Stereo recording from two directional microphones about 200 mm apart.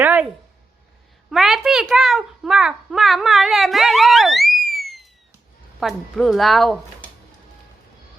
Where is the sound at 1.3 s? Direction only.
Centre (ahead or behind).